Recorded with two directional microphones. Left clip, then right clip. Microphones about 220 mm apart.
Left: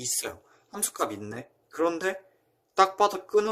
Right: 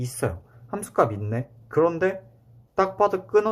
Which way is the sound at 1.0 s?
65° left (ahead or behind).